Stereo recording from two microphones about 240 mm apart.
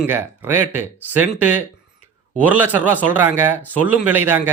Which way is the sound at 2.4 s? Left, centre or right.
Centre.